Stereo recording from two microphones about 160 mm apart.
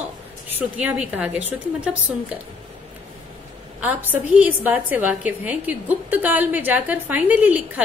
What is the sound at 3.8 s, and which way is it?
A woman's voice, 10° right (ahead or behind).